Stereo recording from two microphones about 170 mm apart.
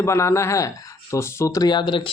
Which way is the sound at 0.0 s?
15° left (ahead or behind).